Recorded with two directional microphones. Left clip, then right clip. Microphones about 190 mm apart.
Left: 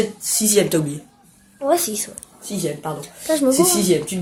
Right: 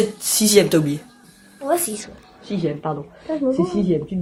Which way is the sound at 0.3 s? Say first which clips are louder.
Right 3 dB; 40° right (ahead or behind).